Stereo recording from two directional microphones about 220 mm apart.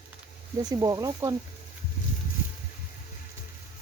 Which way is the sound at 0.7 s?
15° right (ahead or behind).